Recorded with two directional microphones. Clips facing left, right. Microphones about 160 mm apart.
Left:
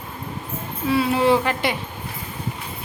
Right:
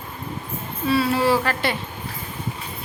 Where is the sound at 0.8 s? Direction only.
15° left (ahead or behind).